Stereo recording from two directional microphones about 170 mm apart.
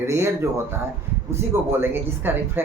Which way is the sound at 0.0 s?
15° right (ahead or behind).